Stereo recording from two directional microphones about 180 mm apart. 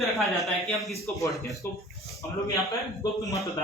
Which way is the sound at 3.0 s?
20° left (ahead or behind).